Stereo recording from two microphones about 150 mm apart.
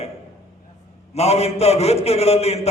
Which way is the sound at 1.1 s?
45° left (ahead or behind).